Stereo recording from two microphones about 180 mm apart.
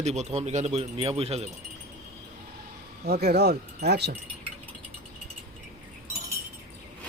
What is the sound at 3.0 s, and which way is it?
Speech, 65° right (ahead or behind).